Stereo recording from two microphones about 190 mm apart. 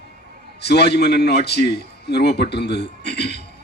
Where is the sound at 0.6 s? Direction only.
60° left (ahead or behind).